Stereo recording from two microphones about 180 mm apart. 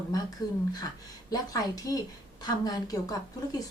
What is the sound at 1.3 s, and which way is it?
A woman's voice, 20° left (ahead or behind).